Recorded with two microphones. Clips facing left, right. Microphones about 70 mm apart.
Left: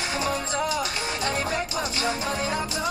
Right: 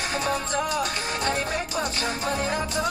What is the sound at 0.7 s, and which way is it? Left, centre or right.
Music, right.